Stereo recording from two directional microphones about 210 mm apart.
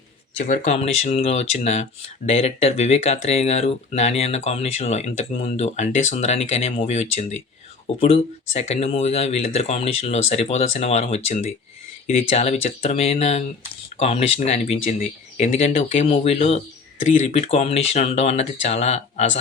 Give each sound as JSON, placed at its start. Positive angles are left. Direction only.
{"t": 0.4, "sound": "speech", "side_deg": 35}